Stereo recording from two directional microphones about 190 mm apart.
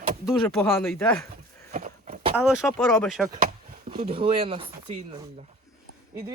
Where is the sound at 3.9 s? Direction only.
30° right (ahead or behind).